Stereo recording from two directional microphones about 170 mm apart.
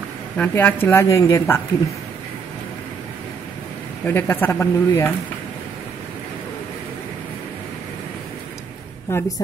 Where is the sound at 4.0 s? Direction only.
10° left (ahead or behind).